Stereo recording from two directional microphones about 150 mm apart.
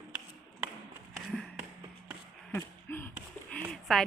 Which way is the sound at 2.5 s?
15° left (ahead or behind).